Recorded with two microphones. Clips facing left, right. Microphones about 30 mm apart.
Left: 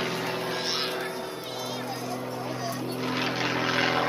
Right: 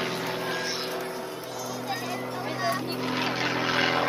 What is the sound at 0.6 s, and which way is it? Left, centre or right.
Vehicle, left.